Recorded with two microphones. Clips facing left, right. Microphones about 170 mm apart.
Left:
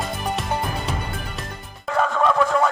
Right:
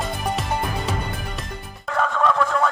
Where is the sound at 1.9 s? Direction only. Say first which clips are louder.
Left 1 dB; 5° left (ahead or behind).